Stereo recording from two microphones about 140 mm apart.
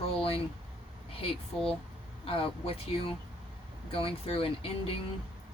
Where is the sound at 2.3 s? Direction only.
40° left (ahead or behind).